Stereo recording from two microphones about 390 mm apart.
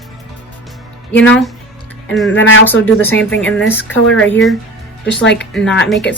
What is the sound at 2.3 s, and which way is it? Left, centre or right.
Speech, left.